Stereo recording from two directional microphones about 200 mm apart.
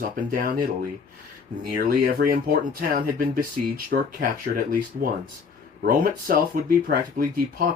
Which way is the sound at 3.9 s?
55° right (ahead or behind).